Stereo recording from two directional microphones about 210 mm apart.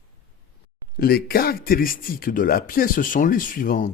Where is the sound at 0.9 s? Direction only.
45° left (ahead or behind).